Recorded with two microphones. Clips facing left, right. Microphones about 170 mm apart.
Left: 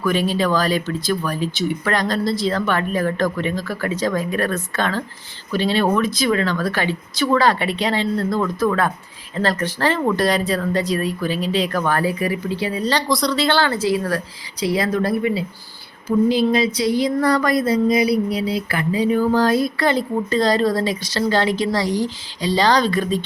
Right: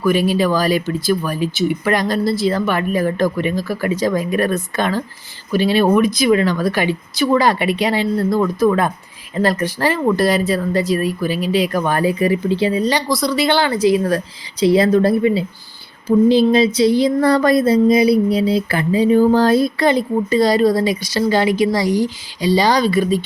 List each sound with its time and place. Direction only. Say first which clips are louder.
0.0 s speech: right 4 dB; 10° right (ahead or behind)
12.9 s speech: right 2 dB; 5° right (ahead or behind)